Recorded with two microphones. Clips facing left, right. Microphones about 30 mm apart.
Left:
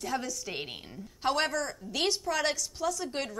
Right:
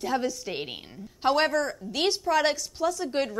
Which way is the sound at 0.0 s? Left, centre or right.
Centre.